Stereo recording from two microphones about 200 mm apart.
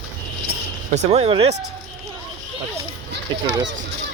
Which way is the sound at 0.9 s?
30° right (ahead or behind).